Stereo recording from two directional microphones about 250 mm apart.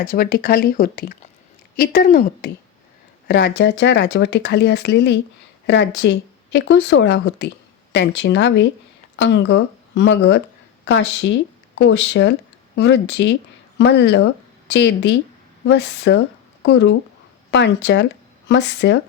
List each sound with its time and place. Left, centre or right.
0.0 s a woman's voice: left